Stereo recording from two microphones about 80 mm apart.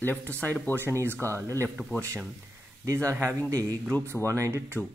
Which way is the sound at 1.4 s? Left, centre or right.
Right.